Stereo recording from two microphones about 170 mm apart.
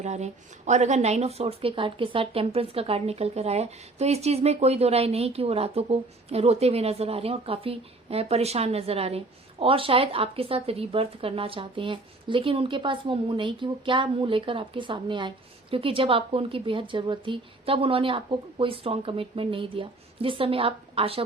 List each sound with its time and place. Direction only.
0.0 s speech: 40° right (ahead or behind)